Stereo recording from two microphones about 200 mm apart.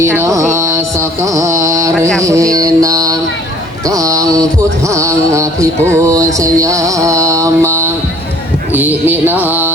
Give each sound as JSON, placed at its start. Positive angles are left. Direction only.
{"t": 0.0, "sound": "music", "side_deg": -15}